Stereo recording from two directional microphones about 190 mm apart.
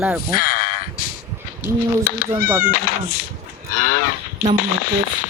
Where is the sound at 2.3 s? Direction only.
15° right (ahead or behind).